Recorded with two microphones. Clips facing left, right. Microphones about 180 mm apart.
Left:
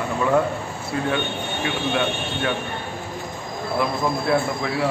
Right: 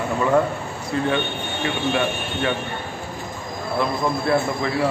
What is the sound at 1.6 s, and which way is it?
Speech, centre (ahead or behind).